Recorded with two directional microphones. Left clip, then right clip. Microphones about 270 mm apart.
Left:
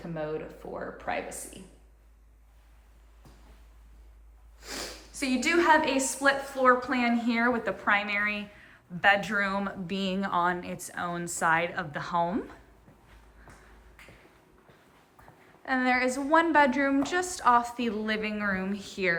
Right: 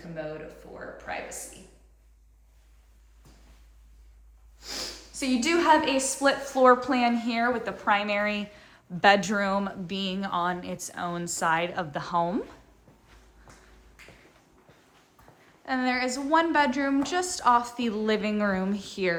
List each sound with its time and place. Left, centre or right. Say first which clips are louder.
0.2 s speech: left 2 dB; centre
4.6 s a woman's voice: right 2 dB; centre
15.6 s a woman's voice: left 1 dB; centre